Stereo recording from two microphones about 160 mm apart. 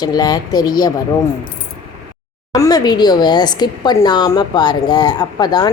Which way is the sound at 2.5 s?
25° left (ahead or behind).